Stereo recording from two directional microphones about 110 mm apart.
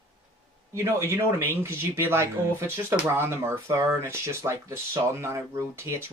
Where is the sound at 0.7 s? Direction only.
25° right (ahead or behind).